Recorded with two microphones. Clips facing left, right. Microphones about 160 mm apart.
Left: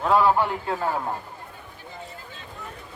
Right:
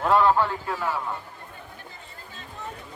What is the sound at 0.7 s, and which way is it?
Speech, 35° left (ahead or behind).